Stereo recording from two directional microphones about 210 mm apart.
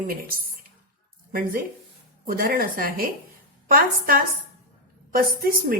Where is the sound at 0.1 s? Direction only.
40° right (ahead or behind).